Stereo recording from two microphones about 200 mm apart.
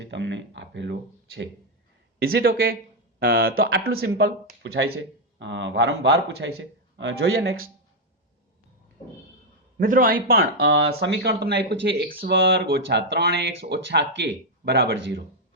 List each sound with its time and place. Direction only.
0.0 s speech: 60° right (ahead or behind)
2.1 s speech: 50° right (ahead or behind)
3.9 s speech: 85° right
4.6 s speech: 60° right (ahead or behind)
9.7 s speech: 45° right (ahead or behind)
10.6 s speech: 60° right (ahead or behind)
12.3 s speech: 65° right (ahead or behind)